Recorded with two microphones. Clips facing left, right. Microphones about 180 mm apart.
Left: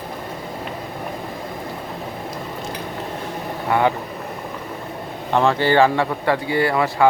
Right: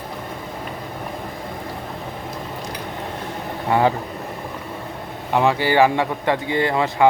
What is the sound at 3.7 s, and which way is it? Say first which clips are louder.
Speech: right 1 dB; 30° right (ahead or behind).